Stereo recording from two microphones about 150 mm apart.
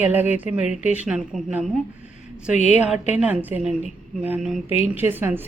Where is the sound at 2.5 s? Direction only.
50° left (ahead or behind).